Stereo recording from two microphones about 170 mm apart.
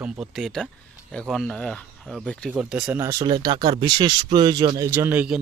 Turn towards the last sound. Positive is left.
turn(degrees=-10)  # may be behind; listen again after turning